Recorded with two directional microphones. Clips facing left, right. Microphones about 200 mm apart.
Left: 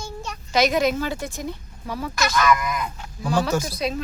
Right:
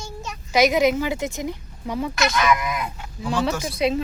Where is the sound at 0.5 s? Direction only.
15° right (ahead or behind).